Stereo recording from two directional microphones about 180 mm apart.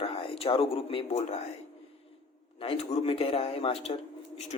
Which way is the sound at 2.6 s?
30° left (ahead or behind).